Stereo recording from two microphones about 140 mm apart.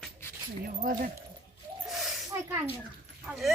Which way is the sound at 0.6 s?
75° right (ahead or behind).